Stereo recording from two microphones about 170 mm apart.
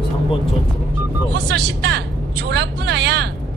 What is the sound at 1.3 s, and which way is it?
Speech, 75° right (ahead or behind).